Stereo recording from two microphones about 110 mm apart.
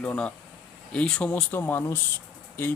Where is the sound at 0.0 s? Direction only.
10° left (ahead or behind).